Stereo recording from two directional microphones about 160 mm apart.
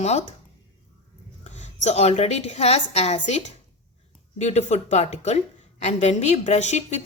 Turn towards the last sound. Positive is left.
turn(degrees=45)  # may be behind; listen again after turning